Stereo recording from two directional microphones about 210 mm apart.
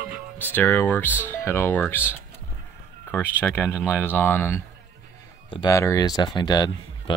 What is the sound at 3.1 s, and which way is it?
Speech, 10° left (ahead or behind).